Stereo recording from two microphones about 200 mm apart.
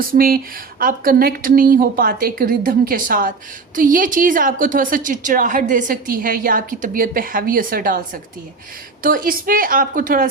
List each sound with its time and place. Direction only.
0.1 s a woman's voice: 45° right (ahead or behind)
9.0 s a woman's voice: 45° right (ahead or behind)